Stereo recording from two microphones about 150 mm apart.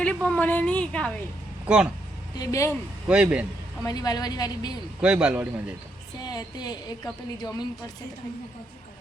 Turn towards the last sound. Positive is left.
turn(degrees=25)  # may be behind; listen again after turning